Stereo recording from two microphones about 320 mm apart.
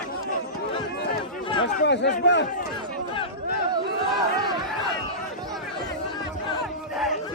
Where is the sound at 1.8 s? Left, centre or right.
Left.